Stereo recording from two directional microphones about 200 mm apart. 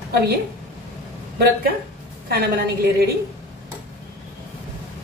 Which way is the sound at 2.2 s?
50° right (ahead or behind).